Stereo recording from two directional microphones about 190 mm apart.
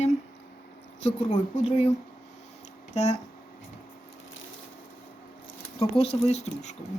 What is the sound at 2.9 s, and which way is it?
Speech, 35° left (ahead or behind).